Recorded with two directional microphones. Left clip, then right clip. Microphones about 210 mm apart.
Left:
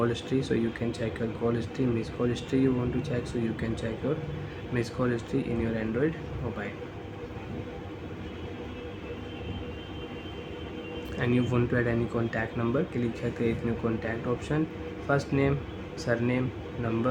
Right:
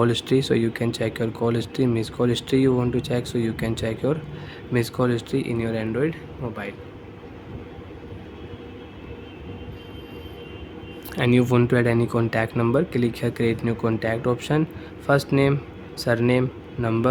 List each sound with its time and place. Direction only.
0.0 s speech: 50° right (ahead or behind)
11.2 s speech: 50° right (ahead or behind)